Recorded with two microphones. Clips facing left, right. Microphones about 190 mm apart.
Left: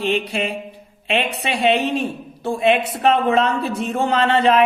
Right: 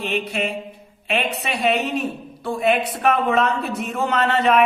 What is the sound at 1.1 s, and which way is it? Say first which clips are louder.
A woman's voice: left 2 dB; 30° left (ahead or behind).